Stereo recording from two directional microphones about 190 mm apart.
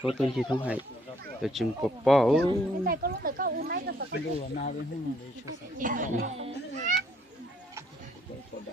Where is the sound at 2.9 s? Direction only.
50° right (ahead or behind).